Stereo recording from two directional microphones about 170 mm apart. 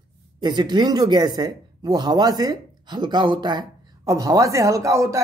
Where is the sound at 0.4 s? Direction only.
25° right (ahead or behind).